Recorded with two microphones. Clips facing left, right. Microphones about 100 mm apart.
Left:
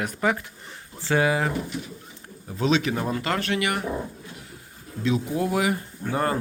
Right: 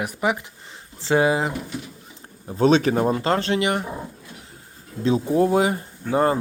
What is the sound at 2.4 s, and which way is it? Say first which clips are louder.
Speech: right 6 dB; 35° right (ahead or behind).